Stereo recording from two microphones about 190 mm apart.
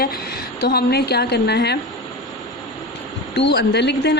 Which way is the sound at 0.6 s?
55° left (ahead or behind).